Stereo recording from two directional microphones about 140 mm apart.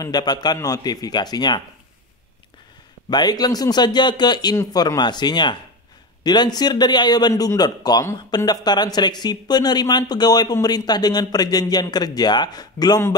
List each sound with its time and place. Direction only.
0.0 s speech: 30° left (ahead or behind)
3.1 s a man's voice: 30° left (ahead or behind)